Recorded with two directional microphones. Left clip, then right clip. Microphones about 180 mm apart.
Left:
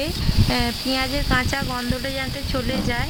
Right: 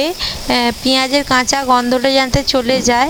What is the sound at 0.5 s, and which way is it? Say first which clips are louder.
Speech: right 10 dB; 40° right (ahead or behind).